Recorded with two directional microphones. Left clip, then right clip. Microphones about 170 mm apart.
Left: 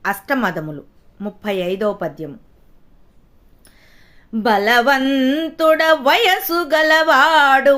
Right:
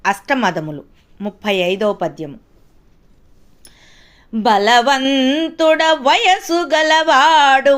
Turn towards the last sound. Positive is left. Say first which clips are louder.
# right 1 dB
turn(degrees=0)  # may be behind; listen again after turning